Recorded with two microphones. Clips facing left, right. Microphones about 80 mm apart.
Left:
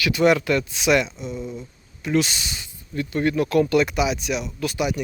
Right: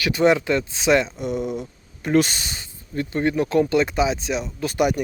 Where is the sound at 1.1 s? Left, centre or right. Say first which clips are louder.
Right 6 dB; right.